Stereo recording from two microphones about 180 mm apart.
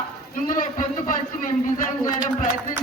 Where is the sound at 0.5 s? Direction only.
45° left (ahead or behind).